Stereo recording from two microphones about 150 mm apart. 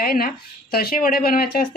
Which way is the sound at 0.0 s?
80° left.